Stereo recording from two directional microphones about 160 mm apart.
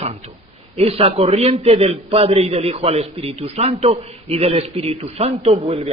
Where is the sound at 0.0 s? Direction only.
40° right (ahead or behind).